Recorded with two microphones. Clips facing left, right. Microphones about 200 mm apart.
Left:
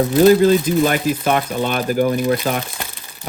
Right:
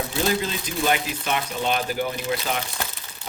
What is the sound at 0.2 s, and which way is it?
Speech, 50° left (ahead or behind).